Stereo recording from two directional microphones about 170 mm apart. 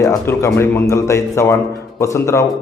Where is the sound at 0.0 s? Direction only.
20° left (ahead or behind).